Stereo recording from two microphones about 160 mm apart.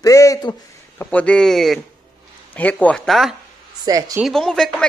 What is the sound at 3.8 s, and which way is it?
Speech, 20° right (ahead or behind).